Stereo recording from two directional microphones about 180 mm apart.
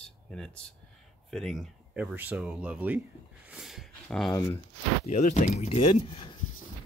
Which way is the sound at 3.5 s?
Centre (ahead or behind).